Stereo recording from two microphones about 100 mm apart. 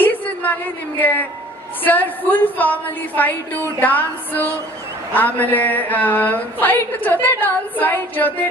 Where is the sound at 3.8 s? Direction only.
15° left (ahead or behind).